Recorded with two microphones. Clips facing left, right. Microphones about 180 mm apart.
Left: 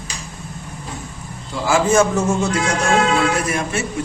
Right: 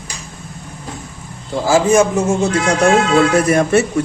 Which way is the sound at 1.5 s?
40° right (ahead or behind).